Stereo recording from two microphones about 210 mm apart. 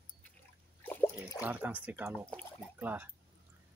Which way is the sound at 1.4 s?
5° right (ahead or behind).